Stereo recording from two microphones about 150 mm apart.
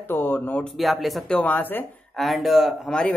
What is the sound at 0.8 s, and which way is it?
Speech, centre (ahead or behind).